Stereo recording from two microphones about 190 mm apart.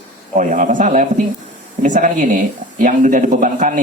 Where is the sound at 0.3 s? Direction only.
40° right (ahead or behind).